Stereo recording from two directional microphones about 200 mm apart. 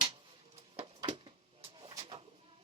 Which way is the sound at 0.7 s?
25° right (ahead or behind).